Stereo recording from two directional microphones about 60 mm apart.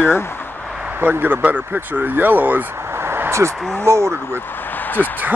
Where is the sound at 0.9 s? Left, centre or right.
Right.